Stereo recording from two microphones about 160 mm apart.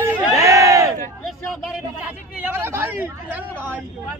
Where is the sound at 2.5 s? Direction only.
15° right (ahead or behind).